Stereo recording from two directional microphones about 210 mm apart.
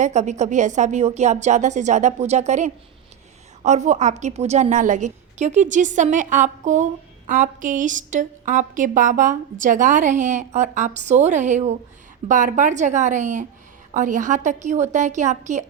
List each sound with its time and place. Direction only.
0.0 s a woman's voice: 35° right (ahead or behind)